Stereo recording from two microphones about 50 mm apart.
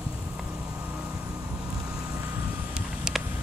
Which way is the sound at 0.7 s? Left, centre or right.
Right.